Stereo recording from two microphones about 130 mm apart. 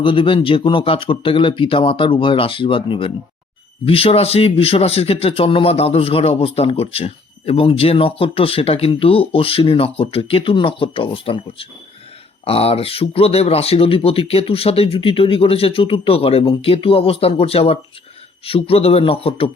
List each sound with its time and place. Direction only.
0.0 s a man's voice: 40° left (ahead or behind)